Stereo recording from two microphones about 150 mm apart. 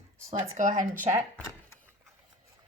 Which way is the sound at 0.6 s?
55° right (ahead or behind).